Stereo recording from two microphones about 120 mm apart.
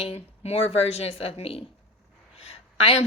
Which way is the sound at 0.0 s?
55° left (ahead or behind).